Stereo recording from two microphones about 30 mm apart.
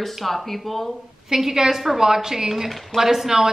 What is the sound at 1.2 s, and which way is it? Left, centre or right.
Speech, centre.